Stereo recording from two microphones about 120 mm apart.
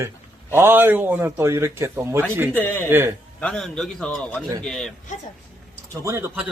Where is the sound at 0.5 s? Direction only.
20° right (ahead or behind).